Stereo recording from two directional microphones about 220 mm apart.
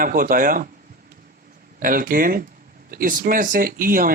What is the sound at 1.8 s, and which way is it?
Speech, 40° right (ahead or behind).